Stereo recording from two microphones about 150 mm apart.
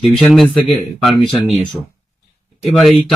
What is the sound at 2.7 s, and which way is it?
Speech, centre (ahead or behind).